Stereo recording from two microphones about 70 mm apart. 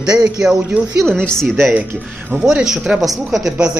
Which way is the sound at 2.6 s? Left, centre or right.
Centre.